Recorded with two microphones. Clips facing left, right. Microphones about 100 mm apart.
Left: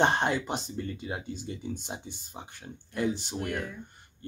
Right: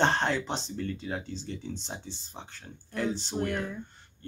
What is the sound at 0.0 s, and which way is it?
Speech, 15° left (ahead or behind).